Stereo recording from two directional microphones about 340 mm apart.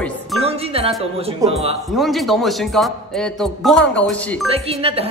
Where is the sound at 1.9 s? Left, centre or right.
Centre.